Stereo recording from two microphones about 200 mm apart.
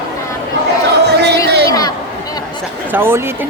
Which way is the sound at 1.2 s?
55° right (ahead or behind).